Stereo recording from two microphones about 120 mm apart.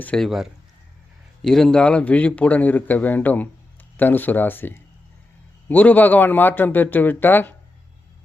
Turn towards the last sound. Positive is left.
turn(degrees=15)  # may be behind; listen again after turning